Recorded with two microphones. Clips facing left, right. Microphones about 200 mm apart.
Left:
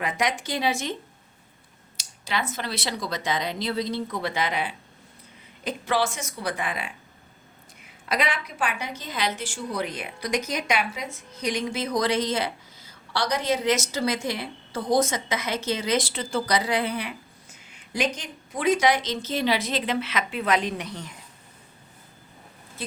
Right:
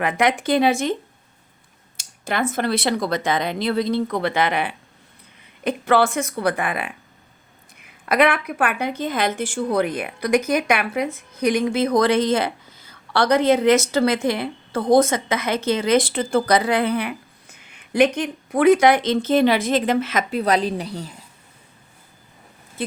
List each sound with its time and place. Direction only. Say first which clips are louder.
0.0 s a woman's voice: right 7 dB; 60° right (ahead or behind)
2.0 s a woman's voice: right 6 dB; 50° right (ahead or behind); by 21.2 s 35° right (ahead or behind)